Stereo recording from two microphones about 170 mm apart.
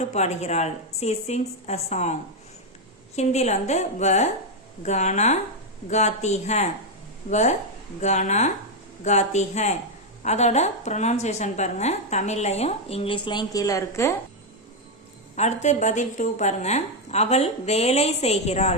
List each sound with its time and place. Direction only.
0.1 s a woman's voice: 40° left (ahead or behind)
3.2 s a woman's voice: 40° left (ahead or behind); by 14.2 s 15° left (ahead or behind)
15.4 s a woman's voice: 45° left (ahead or behind)